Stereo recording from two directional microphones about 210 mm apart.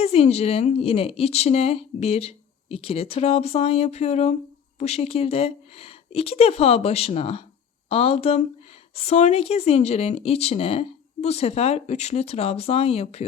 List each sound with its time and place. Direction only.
0.0 s a woman's voice: 30° left (ahead or behind)